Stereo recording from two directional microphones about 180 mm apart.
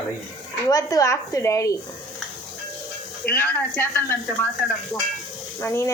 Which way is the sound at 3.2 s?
10° left (ahead or behind).